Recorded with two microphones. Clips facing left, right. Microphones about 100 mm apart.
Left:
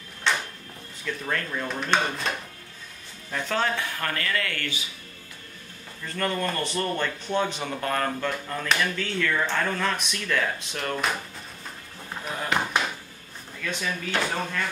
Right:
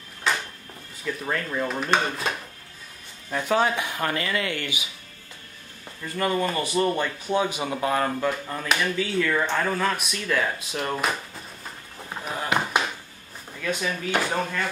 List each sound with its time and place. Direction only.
0.3 s a sound: 5° right (ahead or behind)
1.0 s speech: 10° right (ahead or behind)
3.3 s speech: 10° right (ahead or behind)
6.0 s speech: 10° right (ahead or behind)
12.1 s a sound: 10° right (ahead or behind)
13.6 s speech: 10° right (ahead or behind)